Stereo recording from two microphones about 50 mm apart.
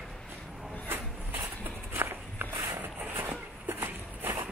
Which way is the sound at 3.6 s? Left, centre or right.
Right.